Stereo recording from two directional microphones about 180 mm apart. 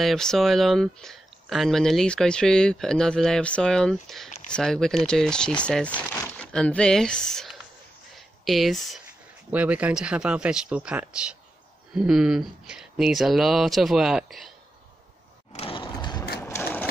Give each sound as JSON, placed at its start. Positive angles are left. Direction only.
{"t": 0.0, "sound": "speech", "side_deg": 0}
{"t": 15.5, "sound": "a sound", "side_deg": 30}
{"t": 16.4, "sound": "sewing machine", "side_deg": 15}